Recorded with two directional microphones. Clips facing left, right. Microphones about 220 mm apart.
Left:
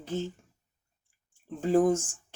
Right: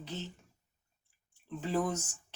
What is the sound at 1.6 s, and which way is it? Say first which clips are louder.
Speech: left 9 dB; 45° left (ahead or behind).